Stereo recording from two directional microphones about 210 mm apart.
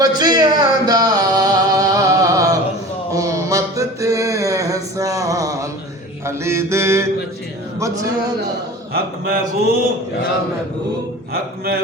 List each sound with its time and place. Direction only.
0.0 s a sound: 20° right (ahead or behind)
6.2 s mantra: 10° right (ahead or behind)
7.8 s music: 15° right (ahead or behind)
8.9 s speech: 45° right (ahead or behind)